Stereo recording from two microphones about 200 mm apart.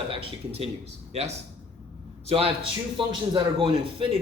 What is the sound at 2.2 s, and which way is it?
A man's voice, 30° right (ahead or behind).